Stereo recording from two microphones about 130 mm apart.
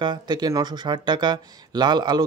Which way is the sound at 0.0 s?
35° right (ahead or behind).